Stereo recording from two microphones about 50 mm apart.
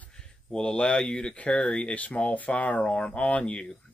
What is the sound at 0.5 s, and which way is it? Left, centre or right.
Speech, centre.